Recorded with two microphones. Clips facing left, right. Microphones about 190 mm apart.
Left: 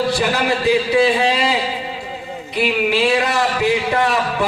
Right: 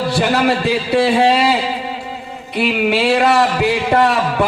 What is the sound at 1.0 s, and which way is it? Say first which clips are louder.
Speech: right 4 dB; 65° right (ahead or behind).